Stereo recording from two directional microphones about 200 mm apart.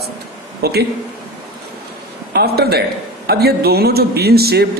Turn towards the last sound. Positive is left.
turn(degrees=-50)  # may be behind; listen again after turning